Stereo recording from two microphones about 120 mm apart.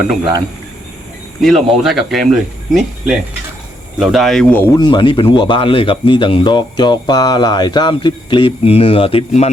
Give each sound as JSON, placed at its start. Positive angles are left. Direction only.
{"t": 1.4, "sound": "speech", "side_deg": 0}
{"t": 4.8, "sound": "speech", "side_deg": 40}